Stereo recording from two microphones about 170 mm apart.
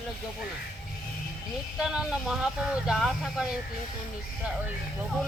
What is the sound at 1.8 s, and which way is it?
Speech, 5° right (ahead or behind).